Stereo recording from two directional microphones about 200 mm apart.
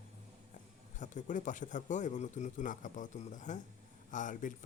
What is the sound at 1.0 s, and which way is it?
Speech, 40° left (ahead or behind).